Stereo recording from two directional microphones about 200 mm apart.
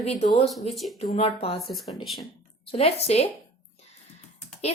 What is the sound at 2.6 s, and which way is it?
Speech, 30° left (ahead or behind).